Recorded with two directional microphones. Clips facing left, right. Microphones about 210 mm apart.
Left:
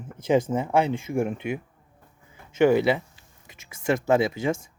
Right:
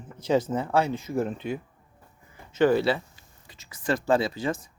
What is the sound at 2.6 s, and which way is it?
Speech, 15° left (ahead or behind).